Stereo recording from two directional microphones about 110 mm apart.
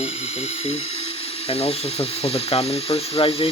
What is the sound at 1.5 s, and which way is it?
Speech, 65° left (ahead or behind).